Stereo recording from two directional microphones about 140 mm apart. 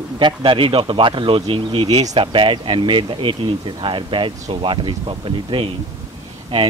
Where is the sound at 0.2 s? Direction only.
40° right (ahead or behind).